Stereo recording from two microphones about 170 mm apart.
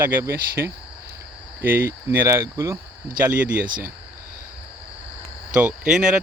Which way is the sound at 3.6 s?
55° right (ahead or behind).